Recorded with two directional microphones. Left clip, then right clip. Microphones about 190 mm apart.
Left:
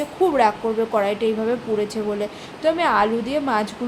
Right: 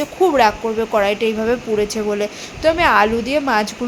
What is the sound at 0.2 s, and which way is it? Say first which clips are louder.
A woman's voice: right 4 dB; 20° right (ahead or behind).